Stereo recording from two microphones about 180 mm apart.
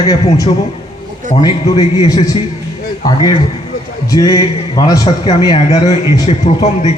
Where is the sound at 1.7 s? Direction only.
20° left (ahead or behind).